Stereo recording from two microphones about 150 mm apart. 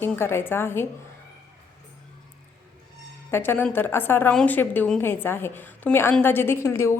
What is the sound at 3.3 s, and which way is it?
Speech, 15° left (ahead or behind).